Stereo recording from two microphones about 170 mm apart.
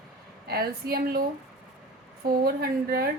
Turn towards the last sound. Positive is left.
turn(degrees=-65)  # may be behind; listen again after turning